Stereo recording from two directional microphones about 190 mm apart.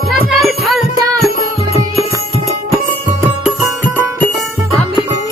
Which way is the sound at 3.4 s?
Centre (ahead or behind).